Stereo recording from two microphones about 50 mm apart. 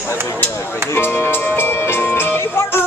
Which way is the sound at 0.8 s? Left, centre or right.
Left.